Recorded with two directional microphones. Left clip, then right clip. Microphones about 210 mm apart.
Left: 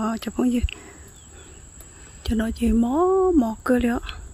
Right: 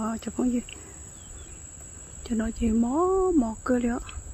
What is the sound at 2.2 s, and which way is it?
Speech, 35° left (ahead or behind).